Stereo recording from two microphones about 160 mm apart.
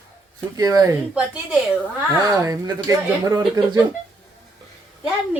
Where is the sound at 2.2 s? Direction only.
20° right (ahead or behind).